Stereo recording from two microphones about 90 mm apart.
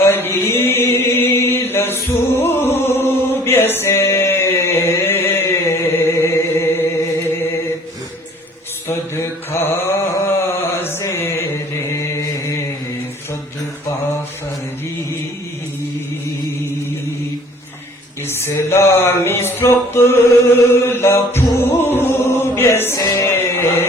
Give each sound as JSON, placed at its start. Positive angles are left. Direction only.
{"t": 0.0, "sound": "chant", "side_deg": 25}
{"t": 2.4, "sound": "music", "side_deg": 25}
{"t": 8.9, "sound": "mantra", "side_deg": 30}
{"t": 18.3, "sound": "a sound", "side_deg": 30}
{"t": 22.2, "sound": "chant", "side_deg": 30}
{"t": 23.0, "sound": "music", "side_deg": 40}
{"t": 23.2, "sound": "music", "side_deg": 25}